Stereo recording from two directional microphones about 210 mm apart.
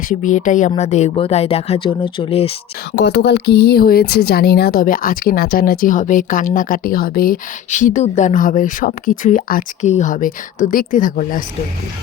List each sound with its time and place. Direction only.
0.1 s speech: 35° left (ahead or behind)
2.9 s speech: 55° left (ahead or behind)